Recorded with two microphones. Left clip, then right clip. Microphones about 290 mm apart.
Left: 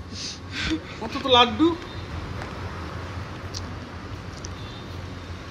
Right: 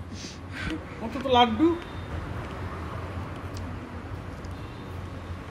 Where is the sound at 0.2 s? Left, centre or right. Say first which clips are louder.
Left 7 dB; centre.